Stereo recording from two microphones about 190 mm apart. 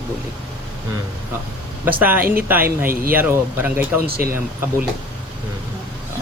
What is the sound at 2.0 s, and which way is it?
Speech, 10° right (ahead or behind).